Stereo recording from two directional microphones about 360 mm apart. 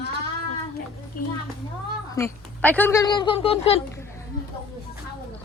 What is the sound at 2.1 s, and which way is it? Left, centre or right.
Speech, centre.